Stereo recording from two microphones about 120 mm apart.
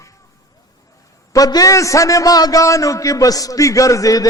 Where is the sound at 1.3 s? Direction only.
30° left (ahead or behind).